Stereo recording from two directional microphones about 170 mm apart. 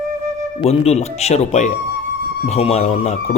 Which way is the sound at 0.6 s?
35° left (ahead or behind).